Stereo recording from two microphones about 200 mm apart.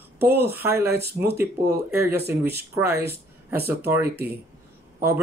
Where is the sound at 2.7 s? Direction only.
10° right (ahead or behind).